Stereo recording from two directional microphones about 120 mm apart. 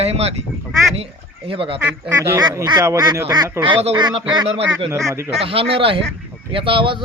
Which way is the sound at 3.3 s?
40° right (ahead or behind).